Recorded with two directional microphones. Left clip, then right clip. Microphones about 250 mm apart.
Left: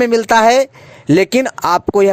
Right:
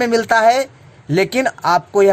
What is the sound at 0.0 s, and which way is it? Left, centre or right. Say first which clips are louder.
Speech: left 2 dB; left.